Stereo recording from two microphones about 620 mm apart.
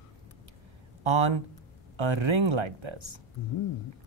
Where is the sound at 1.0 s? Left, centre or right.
Right.